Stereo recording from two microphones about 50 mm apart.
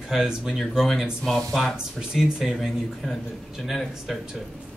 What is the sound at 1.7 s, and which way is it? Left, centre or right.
Speech, centre.